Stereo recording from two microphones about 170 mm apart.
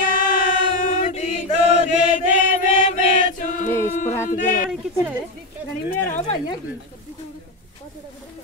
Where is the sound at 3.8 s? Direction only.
45° left (ahead or behind).